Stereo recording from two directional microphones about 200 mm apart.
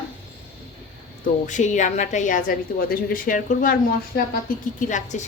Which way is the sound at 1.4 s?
35° left (ahead or behind).